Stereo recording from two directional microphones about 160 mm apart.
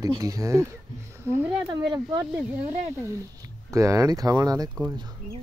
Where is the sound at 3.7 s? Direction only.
20° right (ahead or behind).